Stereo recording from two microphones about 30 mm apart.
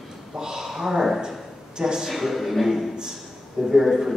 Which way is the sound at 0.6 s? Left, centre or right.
Centre.